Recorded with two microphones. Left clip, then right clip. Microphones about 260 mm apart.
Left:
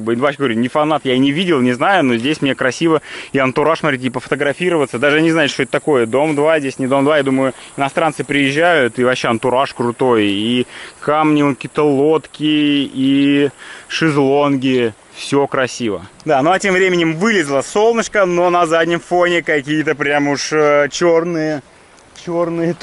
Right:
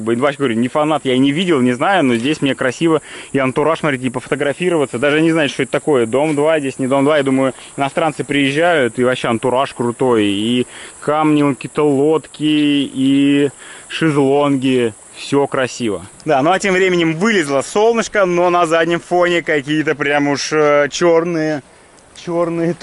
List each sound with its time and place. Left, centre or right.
0.0 s speech: centre
22.3 s speech: centre